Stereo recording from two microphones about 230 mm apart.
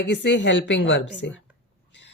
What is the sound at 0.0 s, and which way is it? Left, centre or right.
Speech, left.